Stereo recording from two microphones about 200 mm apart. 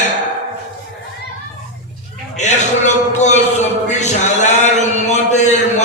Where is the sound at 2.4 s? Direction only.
35° left (ahead or behind).